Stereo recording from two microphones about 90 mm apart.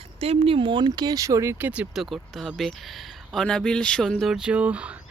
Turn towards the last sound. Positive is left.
turn(degrees=-15)  # may be behind; listen again after turning